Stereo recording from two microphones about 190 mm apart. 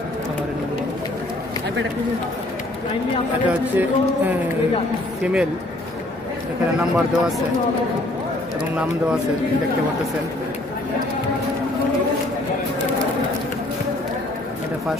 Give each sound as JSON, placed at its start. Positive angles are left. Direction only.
{"t": 3.4, "sound": "speech", "side_deg": -10}
{"t": 6.8, "sound": "speech", "side_deg": 0}